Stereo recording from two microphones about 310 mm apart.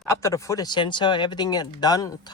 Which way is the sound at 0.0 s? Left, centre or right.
Centre.